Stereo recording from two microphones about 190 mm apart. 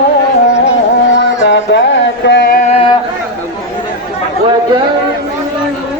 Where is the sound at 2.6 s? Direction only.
35° left (ahead or behind).